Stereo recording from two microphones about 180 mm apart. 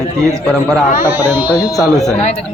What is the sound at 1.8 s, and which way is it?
Speech, centre (ahead or behind).